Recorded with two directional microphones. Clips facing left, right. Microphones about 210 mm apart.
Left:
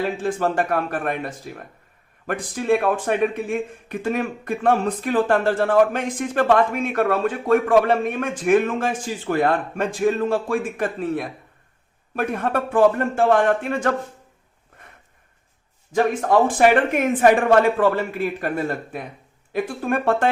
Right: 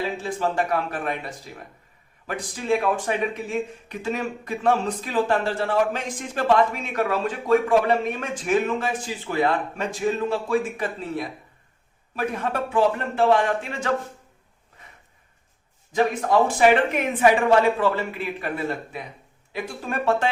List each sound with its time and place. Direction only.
0.2 s speech: 50° left (ahead or behind)
16.5 s speech: 50° left (ahead or behind)